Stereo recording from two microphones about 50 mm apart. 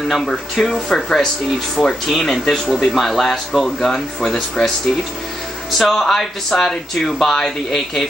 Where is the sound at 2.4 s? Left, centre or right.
Centre.